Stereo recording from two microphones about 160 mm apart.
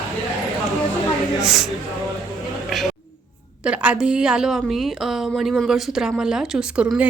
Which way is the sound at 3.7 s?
5° right (ahead or behind).